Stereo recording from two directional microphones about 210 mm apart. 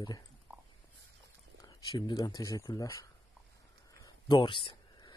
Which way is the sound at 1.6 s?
20° left (ahead or behind).